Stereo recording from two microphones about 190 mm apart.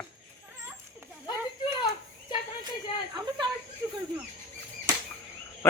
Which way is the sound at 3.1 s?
20° right (ahead or behind).